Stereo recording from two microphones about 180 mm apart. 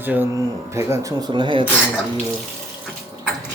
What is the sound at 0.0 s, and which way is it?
Speech, 10° right (ahead or behind).